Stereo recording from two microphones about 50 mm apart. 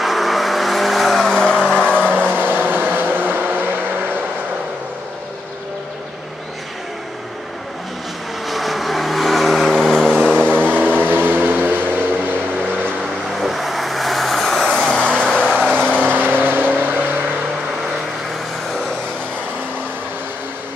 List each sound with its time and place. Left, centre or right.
0.0 s vehicle: centre; by 2.2 s left
2.2 s vehicle: right
8.5 s vehicle: centre
10.1 s vehicle: centre
11.1 s vehicle: right
13.4 s vehicle: centre
16.0 s vehicle: right